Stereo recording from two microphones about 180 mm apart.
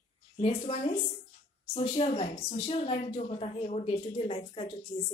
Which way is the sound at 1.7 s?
35° left (ahead or behind).